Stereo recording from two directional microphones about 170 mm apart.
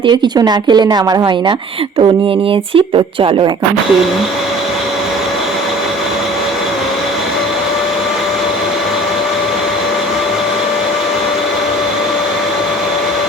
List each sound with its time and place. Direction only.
0.0 s a woman's voice: 25° right (ahead or behind)